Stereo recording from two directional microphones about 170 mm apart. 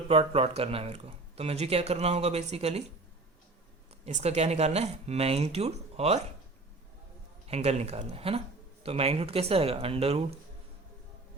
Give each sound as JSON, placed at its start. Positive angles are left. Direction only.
{"t": 0.1, "sound": "speech", "side_deg": -35}
{"t": 4.0, "sound": "speech", "side_deg": -40}
{"t": 7.4, "sound": "speech", "side_deg": -40}